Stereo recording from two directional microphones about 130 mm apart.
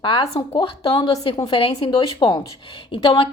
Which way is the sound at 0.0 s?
40° left (ahead or behind).